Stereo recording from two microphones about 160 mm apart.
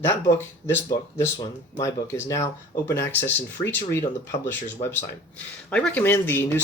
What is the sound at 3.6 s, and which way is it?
Speech, 15° left (ahead or behind).